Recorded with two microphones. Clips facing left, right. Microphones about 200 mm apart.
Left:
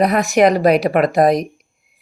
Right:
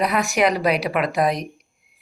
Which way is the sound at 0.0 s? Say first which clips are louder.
Left 6 dB; 40° left (ahead or behind).